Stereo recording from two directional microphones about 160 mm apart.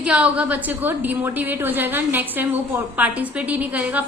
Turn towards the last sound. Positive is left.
turn(degrees=-10)  # may be behind; listen again after turning